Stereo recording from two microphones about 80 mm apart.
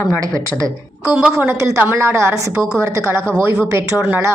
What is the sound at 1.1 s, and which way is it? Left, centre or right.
Speech, right.